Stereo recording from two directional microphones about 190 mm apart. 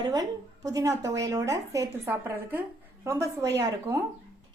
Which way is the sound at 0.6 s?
20° right (ahead or behind).